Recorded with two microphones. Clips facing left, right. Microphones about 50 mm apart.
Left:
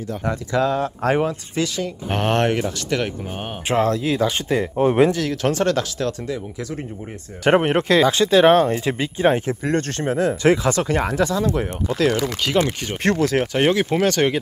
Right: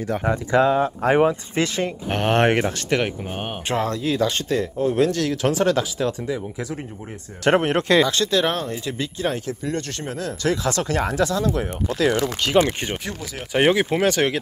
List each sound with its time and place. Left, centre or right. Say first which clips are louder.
0.2 s speech: right 2 dB; centre
1.5 s speech: right 1 dB; right
2.0 s speech: left 1 dB; centre
2.4 s speech: right 2 dB; right
2.9 s speech: right 1 dB; right
3.6 s speech: left 4 dB; centre
5.1 s speech: even; centre
7.4 s speech: left 2 dB; centre; by 9.6 s left
9.6 s speech: left 5 dB; left
10.6 s speech: left 2 dB; centre
12.1 s speech: even; centre
13.0 s speech: left 13 dB; left
13.5 s speech: even; centre